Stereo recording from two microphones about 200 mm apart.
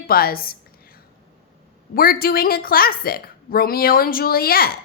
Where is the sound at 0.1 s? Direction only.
50° left (ahead or behind).